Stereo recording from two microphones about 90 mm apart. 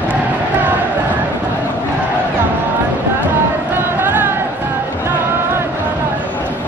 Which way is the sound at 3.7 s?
20° right (ahead or behind).